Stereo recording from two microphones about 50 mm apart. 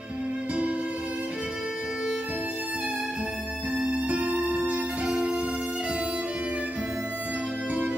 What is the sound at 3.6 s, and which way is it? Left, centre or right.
Music, centre.